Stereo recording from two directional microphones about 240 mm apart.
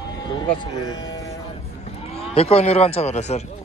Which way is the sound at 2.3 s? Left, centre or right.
Left.